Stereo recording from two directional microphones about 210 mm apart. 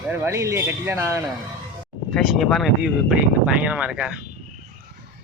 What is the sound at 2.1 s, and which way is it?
Speech, centre (ahead or behind).